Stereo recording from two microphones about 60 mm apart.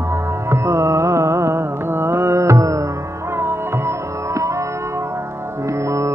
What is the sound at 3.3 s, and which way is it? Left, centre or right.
Sitar, right.